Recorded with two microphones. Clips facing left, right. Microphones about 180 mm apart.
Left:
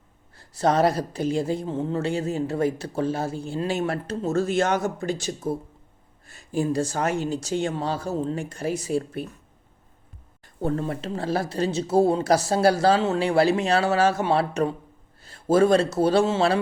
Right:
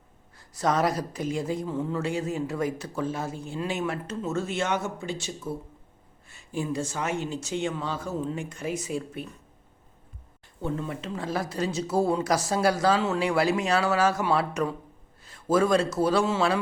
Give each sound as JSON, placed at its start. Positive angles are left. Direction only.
{"t": 0.3, "sound": "a woman's voice", "side_deg": 30}
{"t": 10.6, "sound": "speech", "side_deg": 40}